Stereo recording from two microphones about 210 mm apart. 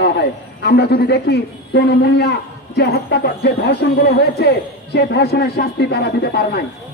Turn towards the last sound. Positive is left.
turn(degrees=50)  # may be behind; listen again after turning